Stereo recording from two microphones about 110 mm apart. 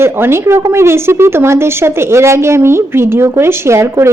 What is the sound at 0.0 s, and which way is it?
A woman's voice, 20° right (ahead or behind).